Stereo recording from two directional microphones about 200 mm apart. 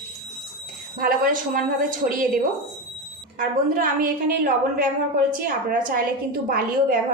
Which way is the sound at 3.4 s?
45° right (ahead or behind).